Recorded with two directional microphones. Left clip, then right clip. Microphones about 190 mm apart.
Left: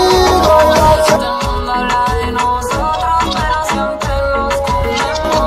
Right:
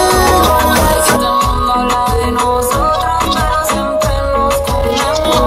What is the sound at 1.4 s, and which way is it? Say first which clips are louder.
Music: right 4 dB; 45° left (ahead or behind).